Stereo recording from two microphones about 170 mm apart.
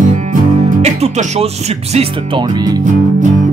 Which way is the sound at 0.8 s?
40° right (ahead or behind).